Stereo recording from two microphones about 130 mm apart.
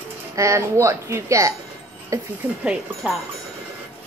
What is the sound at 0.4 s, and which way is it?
A woman's voice, 25° right (ahead or behind).